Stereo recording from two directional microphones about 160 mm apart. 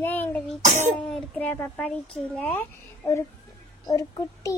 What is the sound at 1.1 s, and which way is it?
A child's voice, 5° left (ahead or behind).